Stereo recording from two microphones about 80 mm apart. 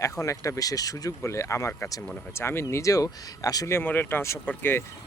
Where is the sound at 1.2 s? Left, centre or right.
Left.